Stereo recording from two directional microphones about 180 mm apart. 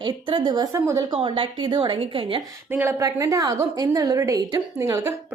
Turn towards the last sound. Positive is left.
turn(degrees=-15)  # may be behind; listen again after turning